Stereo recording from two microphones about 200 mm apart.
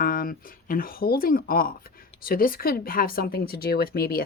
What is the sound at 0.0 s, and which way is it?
Speech, 45° left (ahead or behind).